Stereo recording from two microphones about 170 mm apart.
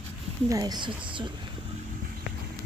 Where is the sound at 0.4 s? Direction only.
20° right (ahead or behind).